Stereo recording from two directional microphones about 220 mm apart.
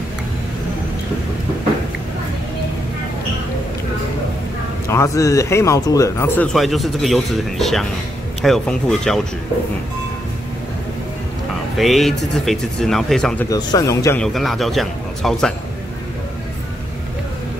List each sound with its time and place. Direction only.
4.8 s speech: 15° left (ahead or behind)
11.7 s speech: centre (ahead or behind)
13.5 s speech: 15° left (ahead or behind)
14.2 s speech: centre (ahead or behind)